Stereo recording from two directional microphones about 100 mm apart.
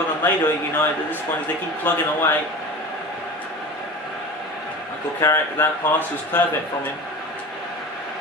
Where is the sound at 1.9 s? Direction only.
15° left (ahead or behind).